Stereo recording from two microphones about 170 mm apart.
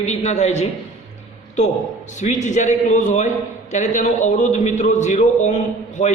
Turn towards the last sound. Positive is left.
turn(degrees=45)  # may be behind; listen again after turning